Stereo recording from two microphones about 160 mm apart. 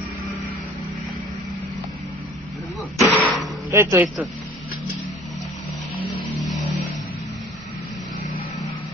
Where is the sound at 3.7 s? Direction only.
15° right (ahead or behind).